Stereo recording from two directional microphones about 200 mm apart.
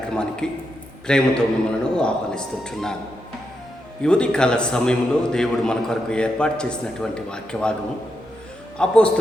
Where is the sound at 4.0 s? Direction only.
5° left (ahead or behind).